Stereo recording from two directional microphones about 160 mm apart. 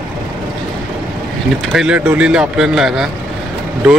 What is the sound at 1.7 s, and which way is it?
Speech, 5° right (ahead or behind).